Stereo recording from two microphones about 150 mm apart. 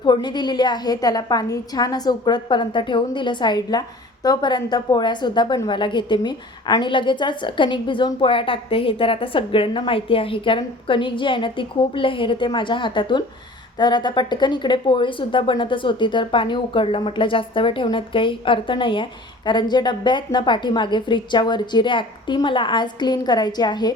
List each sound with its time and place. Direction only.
0.0 s a woman's voice: 30° left (ahead or behind)